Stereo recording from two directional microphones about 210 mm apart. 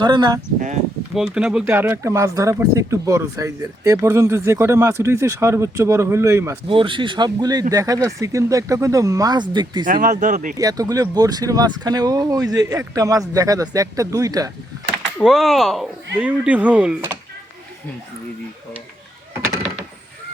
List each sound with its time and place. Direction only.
0.0 s speech: 20° right (ahead or behind)
1.1 s speech: 5° right (ahead or behind)
6.7 s speech: 25° right (ahead or behind)
9.8 s speech: 40° right (ahead or behind)
10.6 s speech: 15° right (ahead or behind)
15.2 s speech: centre (ahead or behind)